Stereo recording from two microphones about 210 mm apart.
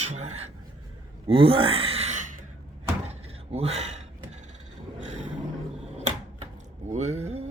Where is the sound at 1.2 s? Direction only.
25° right (ahead or behind).